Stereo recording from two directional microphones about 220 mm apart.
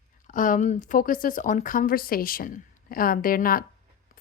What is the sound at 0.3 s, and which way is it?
Speech, 35° left (ahead or behind).